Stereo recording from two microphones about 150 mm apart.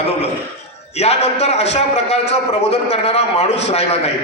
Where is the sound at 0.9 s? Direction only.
45° left (ahead or behind).